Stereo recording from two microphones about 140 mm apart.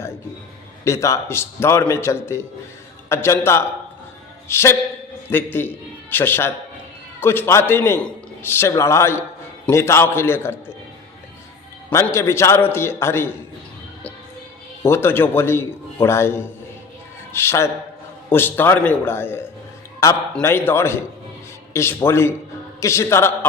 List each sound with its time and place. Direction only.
0.9 s a man's voice: 20° left (ahead or behind)
12.1 s a man's voice: 20° left (ahead or behind)
14.8 s a man's voice: 15° left (ahead or behind)